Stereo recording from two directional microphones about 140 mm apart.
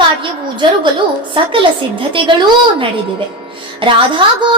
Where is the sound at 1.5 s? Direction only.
35° right (ahead or behind).